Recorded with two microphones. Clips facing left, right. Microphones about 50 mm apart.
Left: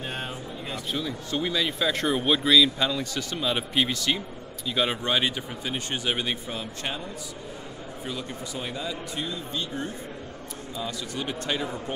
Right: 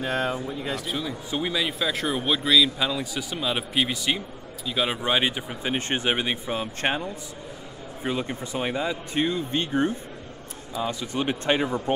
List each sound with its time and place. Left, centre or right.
0.1 s speech: right
0.8 s speech: centre
5.0 s speech: centre
5.7 s speech: right
8.0 s speech: right
10.8 s speech: right